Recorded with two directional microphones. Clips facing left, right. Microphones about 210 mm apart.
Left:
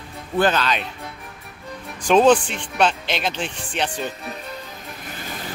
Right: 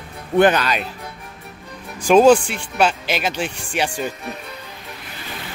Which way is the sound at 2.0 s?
10° right (ahead or behind).